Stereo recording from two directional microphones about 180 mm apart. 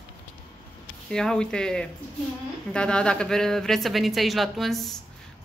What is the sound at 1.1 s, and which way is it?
Speech, 5° left (ahead or behind).